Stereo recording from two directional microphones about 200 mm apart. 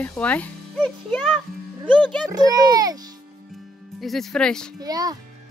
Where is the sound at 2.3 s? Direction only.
20° right (ahead or behind).